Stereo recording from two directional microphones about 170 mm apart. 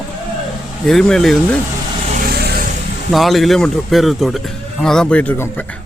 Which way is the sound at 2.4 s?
70° right (ahead or behind).